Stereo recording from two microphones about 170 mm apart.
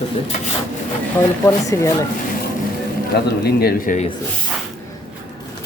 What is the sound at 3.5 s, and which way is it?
Speech, 65° left (ahead or behind).